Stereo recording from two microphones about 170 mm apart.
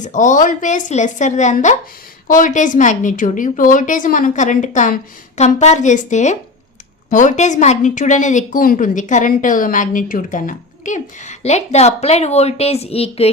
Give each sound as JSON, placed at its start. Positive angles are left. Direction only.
{"t": 0.0, "sound": "a woman's voice", "side_deg": 45}